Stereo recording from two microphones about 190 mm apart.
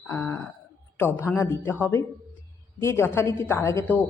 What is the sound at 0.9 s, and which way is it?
A woman's voice, 10° left (ahead or behind).